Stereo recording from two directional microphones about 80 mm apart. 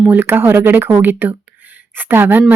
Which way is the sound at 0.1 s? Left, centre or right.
Right.